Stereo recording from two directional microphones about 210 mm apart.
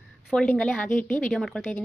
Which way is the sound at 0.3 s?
5° left (ahead or behind).